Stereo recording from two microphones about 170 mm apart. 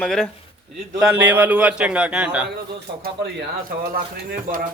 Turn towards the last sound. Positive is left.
turn(degrees=-60)  # may be behind; listen again after turning